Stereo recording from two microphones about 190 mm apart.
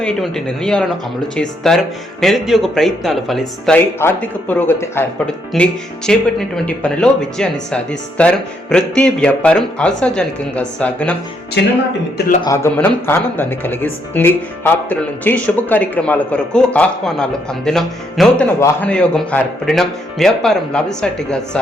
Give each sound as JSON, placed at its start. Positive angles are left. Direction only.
{"t": 0.0, "sound": "speech", "side_deg": 5}
{"t": 11.6, "sound": "speech", "side_deg": 65}
{"t": 12.4, "sound": "speech", "side_deg": 15}